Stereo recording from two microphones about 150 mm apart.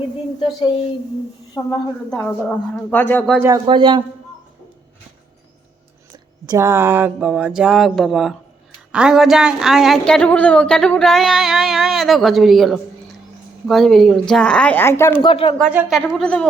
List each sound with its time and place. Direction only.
0.3 s speech: 35° left (ahead or behind)
1.6 s speech: 15° left (ahead or behind)
3.7 s a man's voice: 30° right (ahead or behind)
6.4 s speech: 20° right (ahead or behind); by 15.2 s 15° left (ahead or behind)
15.2 s speech: 35° left (ahead or behind)
15.9 s speech: centre (ahead or behind)